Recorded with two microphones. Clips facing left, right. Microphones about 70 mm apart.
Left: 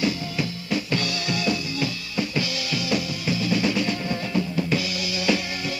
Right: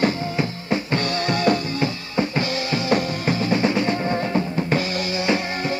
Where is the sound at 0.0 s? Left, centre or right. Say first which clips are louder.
Right 4 dB; right.